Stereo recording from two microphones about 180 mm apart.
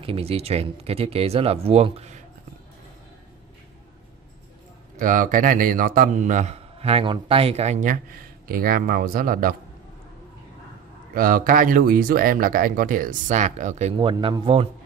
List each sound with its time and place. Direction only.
0.0 s speech: 30° right (ahead or behind)
4.9 s a man's voice: 50° right (ahead or behind)
11.1 s a man's voice: 50° right (ahead or behind)
13.9 s speech: 30° right (ahead or behind)